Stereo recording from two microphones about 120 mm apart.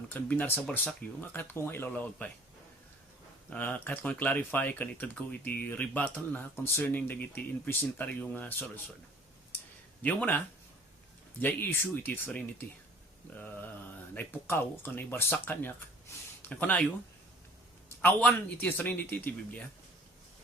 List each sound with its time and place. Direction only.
0.1 s speech: 15° left (ahead or behind)
3.5 s speech: 15° left (ahead or behind)
10.0 s speech: 10° left (ahead or behind)
17.8 s speech: 15° left (ahead or behind)